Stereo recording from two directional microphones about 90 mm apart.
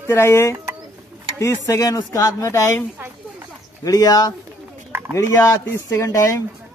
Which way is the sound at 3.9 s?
45° left (ahead or behind).